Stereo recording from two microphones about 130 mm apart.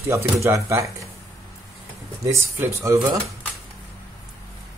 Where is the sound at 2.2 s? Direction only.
25° right (ahead or behind).